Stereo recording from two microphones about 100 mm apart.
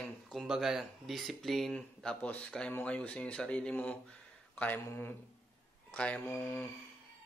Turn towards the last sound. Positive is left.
turn(degrees=15)  # may be behind; listen again after turning